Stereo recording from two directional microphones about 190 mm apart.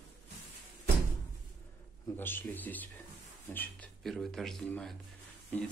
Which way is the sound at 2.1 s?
10° left (ahead or behind).